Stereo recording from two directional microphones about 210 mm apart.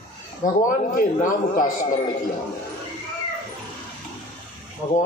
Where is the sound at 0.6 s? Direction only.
40° left (ahead or behind).